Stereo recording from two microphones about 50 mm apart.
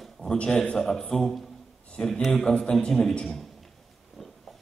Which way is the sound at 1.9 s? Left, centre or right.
Centre.